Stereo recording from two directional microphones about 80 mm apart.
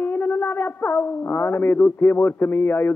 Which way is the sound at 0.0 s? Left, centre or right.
Left.